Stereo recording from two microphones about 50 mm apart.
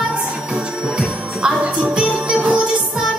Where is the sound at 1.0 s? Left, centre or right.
Centre.